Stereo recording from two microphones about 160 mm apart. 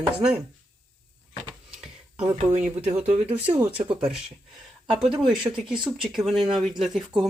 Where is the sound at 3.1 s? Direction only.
35° right (ahead or behind).